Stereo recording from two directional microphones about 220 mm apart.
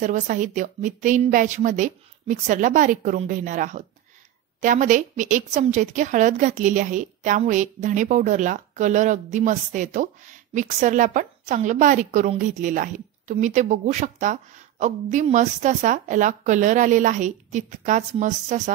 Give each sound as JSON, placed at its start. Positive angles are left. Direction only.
{"t": 0.0, "sound": "a woman's voice", "side_deg": -35}